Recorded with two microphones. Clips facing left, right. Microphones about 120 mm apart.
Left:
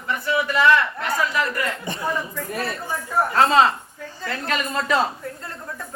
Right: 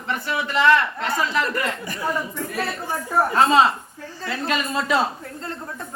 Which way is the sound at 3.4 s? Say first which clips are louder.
Left 1 dB; 10° right (ahead or behind).